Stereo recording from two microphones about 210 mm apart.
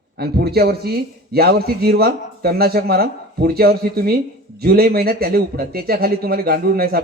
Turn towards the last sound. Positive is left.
turn(degrees=-45)  # may be behind; listen again after turning